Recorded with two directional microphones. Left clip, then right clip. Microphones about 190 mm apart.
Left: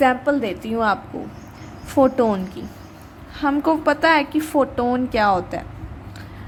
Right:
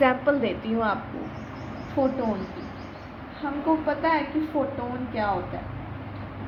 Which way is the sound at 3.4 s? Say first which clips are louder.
Left 7 dB; 50° left (ahead or behind).